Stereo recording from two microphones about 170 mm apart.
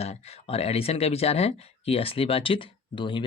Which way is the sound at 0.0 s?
35° left (ahead or behind).